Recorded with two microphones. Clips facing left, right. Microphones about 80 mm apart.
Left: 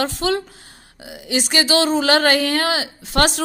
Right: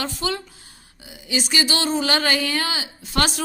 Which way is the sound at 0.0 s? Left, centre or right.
Left.